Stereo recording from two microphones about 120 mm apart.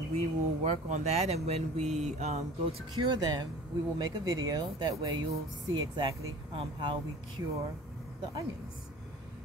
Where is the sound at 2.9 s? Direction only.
35° right (ahead or behind).